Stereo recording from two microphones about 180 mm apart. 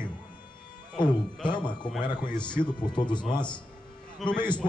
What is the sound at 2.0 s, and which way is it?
Speech, 25° left (ahead or behind).